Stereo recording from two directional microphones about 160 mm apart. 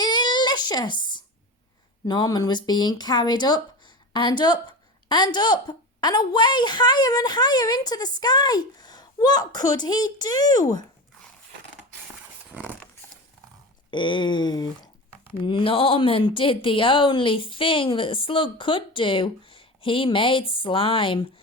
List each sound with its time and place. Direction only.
0.0 s a sound: 25° left (ahead or behind)
2.0 s a woman's voice: 25° left (ahead or behind)
13.9 s a woman's voice: 30° left (ahead or behind)